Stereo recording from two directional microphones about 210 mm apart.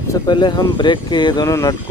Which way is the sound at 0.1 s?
20° left (ahead or behind).